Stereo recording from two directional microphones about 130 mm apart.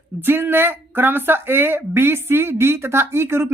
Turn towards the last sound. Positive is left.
turn(degrees=-20)  # may be behind; listen again after turning